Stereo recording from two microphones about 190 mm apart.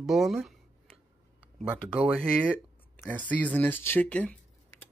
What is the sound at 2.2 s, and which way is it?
Speech, 10° left (ahead or behind).